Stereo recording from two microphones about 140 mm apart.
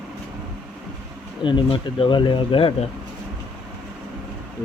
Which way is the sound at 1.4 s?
35° left (ahead or behind).